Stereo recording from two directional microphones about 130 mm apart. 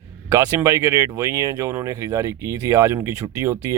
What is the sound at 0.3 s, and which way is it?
Speech, 25° right (ahead or behind).